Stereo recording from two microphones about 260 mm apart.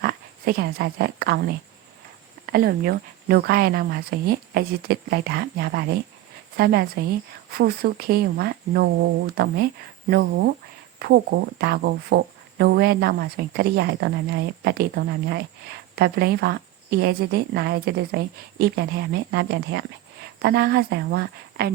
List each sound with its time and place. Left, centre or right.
0.0 s speech: right